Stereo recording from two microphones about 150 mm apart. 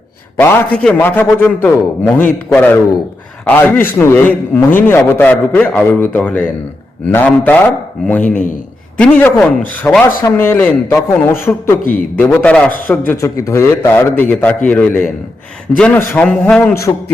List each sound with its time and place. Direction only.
0.8 s a man's voice: 10° left (ahead or behind)